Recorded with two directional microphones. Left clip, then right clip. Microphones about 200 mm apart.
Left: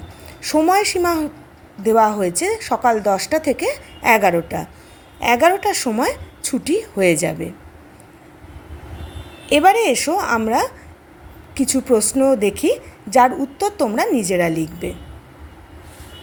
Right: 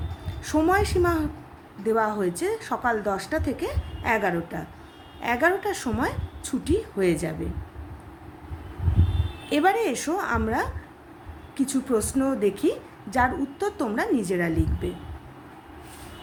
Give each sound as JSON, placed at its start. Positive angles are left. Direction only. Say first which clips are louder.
{"t": 0.4, "sound": "a woman's voice", "louder": "left 7 dB", "side_deg": 25}
{"t": 9.5, "sound": "a woman's voice", "louder": "left 9 dB", "side_deg": 25}